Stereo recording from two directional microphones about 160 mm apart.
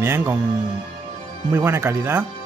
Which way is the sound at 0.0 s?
15° right (ahead or behind).